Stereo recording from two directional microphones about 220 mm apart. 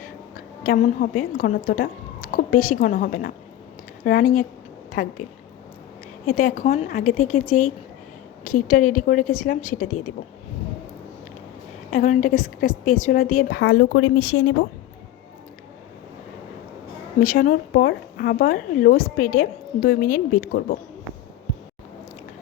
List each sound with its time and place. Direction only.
0.0 s a woman's voice: 40° left (ahead or behind)
6.2 s speech: 35° left (ahead or behind)
11.9 s speech: 35° left (ahead or behind)
13.6 s speech: 65° left (ahead or behind); by 14.5 s 85° left
17.2 s speech: 40° left (ahead or behind)